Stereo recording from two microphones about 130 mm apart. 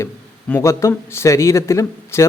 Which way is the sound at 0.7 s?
20° left (ahead or behind).